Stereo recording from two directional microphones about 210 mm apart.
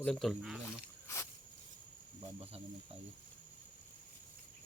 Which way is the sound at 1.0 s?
15° left (ahead or behind).